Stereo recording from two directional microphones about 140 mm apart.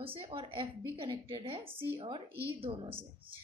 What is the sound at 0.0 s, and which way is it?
A woman's voice, 40° right (ahead or behind).